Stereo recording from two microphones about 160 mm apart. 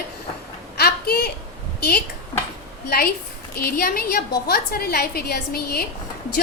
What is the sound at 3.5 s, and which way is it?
A woman's voice, 70° left (ahead or behind).